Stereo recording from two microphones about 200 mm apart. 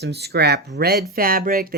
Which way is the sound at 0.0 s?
55° right (ahead or behind).